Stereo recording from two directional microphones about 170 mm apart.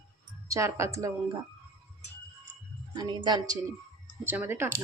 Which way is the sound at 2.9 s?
25° right (ahead or behind).